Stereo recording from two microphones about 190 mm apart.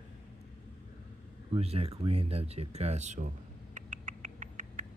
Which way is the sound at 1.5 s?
30° right (ahead or behind).